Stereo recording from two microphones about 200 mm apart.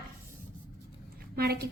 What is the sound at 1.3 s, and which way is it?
Speech, 50° right (ahead or behind).